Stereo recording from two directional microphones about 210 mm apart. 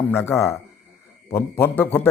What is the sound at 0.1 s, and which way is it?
Speech, 10° left (ahead or behind).